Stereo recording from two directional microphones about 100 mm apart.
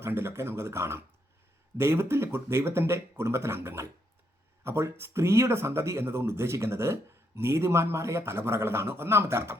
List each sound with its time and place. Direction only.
0.0 s speech: 25° right (ahead or behind)